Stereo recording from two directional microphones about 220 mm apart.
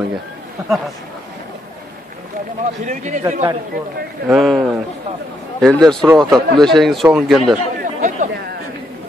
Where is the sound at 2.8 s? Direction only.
35° right (ahead or behind).